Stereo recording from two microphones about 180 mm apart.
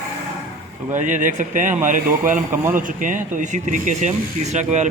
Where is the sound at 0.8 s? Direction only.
45° right (ahead or behind).